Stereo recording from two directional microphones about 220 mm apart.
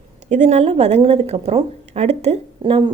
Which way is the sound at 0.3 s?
30° right (ahead or behind).